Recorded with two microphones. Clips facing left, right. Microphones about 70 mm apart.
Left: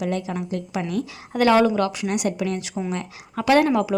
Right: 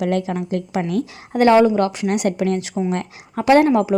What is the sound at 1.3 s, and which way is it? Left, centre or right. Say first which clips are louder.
Speech: right 4 dB; right.